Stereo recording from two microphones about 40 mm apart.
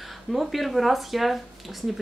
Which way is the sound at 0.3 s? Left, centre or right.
Centre.